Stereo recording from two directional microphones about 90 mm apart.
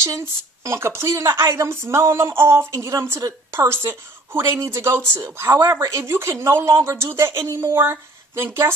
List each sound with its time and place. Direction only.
0.0 s a woman's voice: 35° right (ahead or behind)